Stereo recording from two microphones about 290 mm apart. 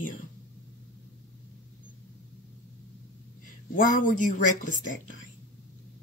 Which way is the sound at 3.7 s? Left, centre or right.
Left.